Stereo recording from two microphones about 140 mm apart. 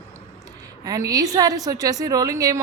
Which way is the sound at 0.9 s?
25° right (ahead or behind).